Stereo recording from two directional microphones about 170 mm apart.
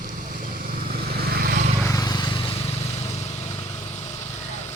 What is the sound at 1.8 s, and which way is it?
Vehicle, 20° left (ahead or behind).